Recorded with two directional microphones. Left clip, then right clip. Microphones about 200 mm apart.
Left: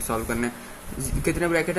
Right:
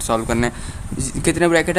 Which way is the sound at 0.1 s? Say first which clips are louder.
Right 8 dB; 45° right (ahead or behind).